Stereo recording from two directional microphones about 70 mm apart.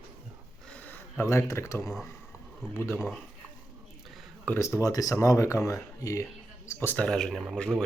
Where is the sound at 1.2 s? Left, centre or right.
Left.